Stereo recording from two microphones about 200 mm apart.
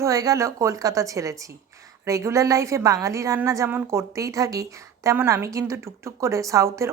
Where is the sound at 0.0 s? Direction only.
15° right (ahead or behind).